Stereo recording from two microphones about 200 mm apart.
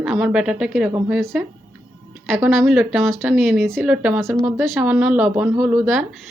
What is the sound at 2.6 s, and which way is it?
A woman's voice, 5° right (ahead or behind).